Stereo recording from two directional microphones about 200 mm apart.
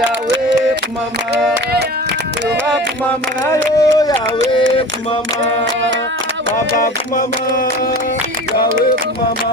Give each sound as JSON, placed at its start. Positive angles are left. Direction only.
{"t": 3.6, "sound": "speech", "side_deg": 15}
{"t": 6.7, "sound": "music", "side_deg": 45}